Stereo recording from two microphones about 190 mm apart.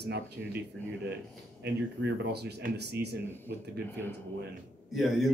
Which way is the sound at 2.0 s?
65° right (ahead or behind).